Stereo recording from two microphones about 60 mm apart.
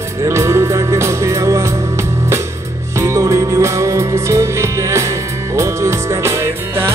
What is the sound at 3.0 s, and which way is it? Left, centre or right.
Music, right.